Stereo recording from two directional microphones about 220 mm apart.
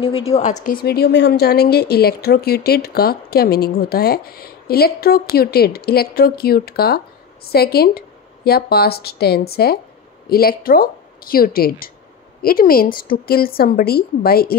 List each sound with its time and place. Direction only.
0.0 s a woman's voice: 25° left (ahead or behind)
0.7 s a woman's voice: 45° left (ahead or behind)